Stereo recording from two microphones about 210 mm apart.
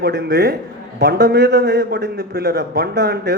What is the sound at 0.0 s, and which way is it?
A man's voice, 50° right (ahead or behind).